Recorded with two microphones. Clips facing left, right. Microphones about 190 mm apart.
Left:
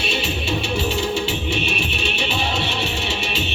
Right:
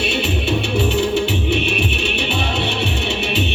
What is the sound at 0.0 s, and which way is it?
Music, 60° right (ahead or behind).